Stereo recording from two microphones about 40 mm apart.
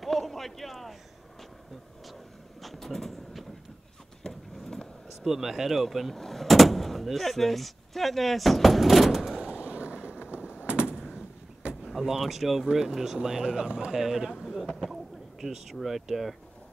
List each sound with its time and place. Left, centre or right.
0.0 s a sound: centre
2.6 s vehicle: centre
4.3 s clip-clop: centre
5.2 s speech: centre
9.4 s a sound: right
10.7 s gunshot: right
11.8 s speech: centre
14.4 s a sound: centre
15.4 s speech: centre